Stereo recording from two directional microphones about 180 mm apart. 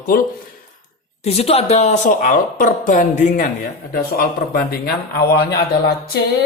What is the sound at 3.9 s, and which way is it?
Speech, 60° left (ahead or behind).